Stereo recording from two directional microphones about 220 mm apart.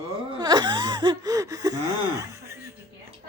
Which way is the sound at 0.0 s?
20° right (ahead or behind).